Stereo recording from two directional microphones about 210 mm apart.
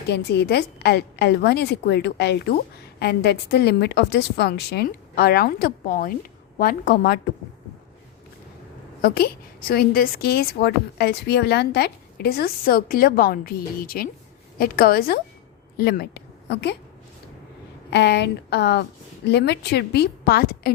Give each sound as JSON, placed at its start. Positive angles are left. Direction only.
{"t": 0.1, "sound": "a woman's voice", "side_deg": 50}
{"t": 9.0, "sound": "a woman's voice", "side_deg": 45}
{"t": 17.9, "sound": "a woman's voice", "side_deg": 55}